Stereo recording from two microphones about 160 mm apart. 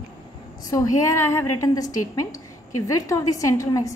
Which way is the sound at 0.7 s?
20° left (ahead or behind).